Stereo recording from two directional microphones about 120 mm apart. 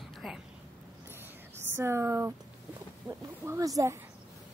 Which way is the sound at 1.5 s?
20° right (ahead or behind).